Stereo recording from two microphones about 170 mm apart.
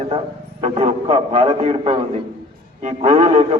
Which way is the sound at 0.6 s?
40° right (ahead or behind).